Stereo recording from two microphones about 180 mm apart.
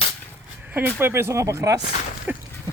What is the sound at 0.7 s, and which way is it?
Speech, 10° right (ahead or behind).